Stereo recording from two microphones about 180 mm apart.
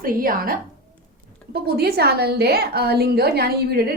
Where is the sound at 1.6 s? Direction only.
60° right (ahead or behind).